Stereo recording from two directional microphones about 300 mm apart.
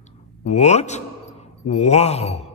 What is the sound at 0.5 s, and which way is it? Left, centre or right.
Speech, left.